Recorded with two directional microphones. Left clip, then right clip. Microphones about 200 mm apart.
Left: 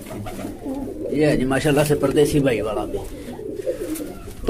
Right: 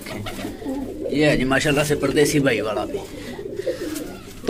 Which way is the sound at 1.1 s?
20° left (ahead or behind).